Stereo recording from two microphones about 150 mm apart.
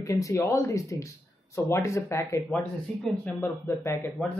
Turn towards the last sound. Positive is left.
turn(degrees=20)  # may be behind; listen again after turning